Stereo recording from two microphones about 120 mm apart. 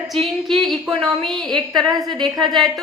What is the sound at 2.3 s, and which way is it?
Speech, 35° right (ahead or behind).